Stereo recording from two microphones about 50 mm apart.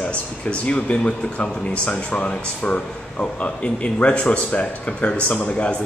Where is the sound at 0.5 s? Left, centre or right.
Left.